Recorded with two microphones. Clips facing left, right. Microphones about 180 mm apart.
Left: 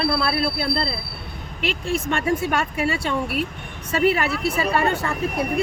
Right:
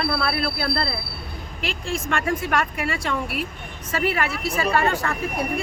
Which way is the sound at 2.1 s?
25° left (ahead or behind).